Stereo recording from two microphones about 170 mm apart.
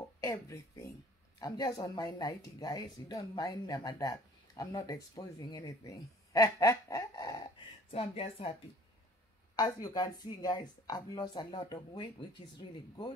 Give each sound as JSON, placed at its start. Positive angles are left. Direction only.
{"t": 0.2, "sound": "speech", "side_deg": 20}
{"t": 7.9, "sound": "speech", "side_deg": 35}
{"t": 9.6, "sound": "speech", "side_deg": 20}